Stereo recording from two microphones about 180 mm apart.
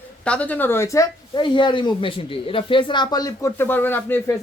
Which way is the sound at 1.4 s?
25° left (ahead or behind).